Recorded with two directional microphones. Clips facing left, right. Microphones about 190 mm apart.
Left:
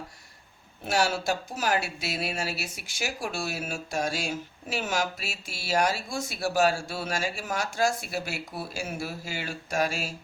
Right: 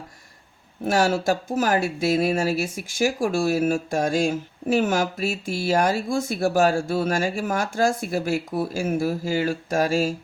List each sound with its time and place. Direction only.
0.9 s speech: 50° right (ahead or behind)